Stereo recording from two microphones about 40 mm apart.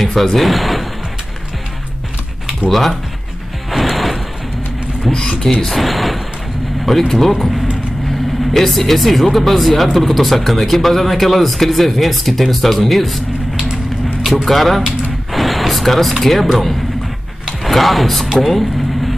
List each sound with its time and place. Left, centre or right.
0.0 s speech: centre
3.7 s music: centre
5.0 s speech: centre
5.6 s speech: centre
14.4 s speech: centre
17.6 s speech: centre
18.4 s vehicle: centre